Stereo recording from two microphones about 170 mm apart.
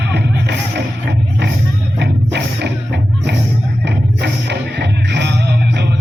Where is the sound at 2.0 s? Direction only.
85° right.